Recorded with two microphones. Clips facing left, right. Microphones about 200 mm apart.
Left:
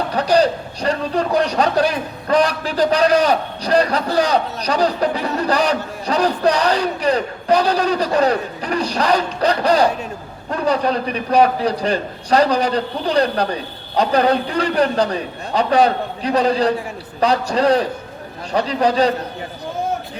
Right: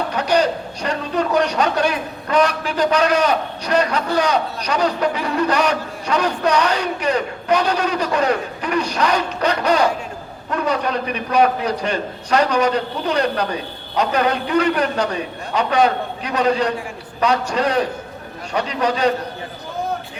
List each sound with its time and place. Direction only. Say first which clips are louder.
0.1 s a man's voice: left 3 dB; 35° left (ahead or behind)